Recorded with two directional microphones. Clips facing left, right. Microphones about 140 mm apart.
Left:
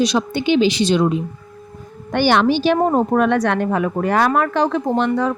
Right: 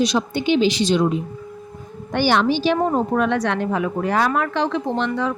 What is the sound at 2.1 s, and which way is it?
Speech, 65° left (ahead or behind).